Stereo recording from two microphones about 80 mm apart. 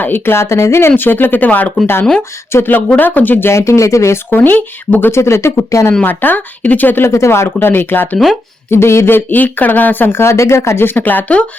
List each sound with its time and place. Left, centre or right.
0.0 s speech: left
3.5 s speech: left
4.3 s speech: left
6.0 s speech: left
7.1 s speech: left; by 11.4 s centre